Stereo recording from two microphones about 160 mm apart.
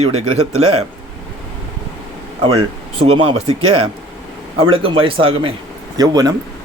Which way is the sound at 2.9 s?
35° right (ahead or behind).